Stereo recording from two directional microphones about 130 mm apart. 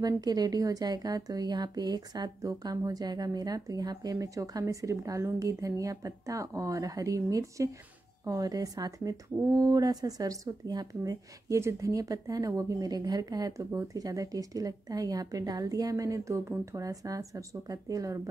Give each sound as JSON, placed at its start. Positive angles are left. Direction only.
{"t": 0.0, "sound": "speech", "side_deg": -30}